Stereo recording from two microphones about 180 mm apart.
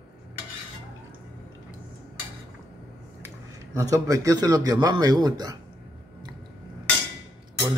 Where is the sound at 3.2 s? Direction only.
15° right (ahead or behind).